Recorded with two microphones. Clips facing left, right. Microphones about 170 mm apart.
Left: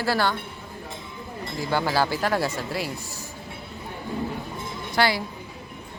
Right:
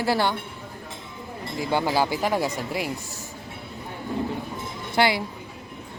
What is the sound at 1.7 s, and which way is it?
A woman's voice, 20° right (ahead or behind).